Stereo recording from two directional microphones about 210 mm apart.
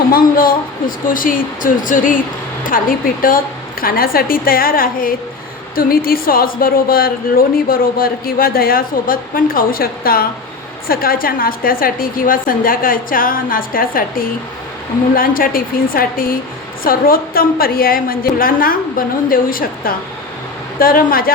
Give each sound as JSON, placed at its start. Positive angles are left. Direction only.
{"t": 0.1, "sound": "a woman's voice", "side_deg": 45}